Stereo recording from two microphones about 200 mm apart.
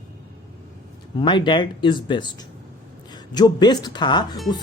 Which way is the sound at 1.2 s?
25° left (ahead or behind).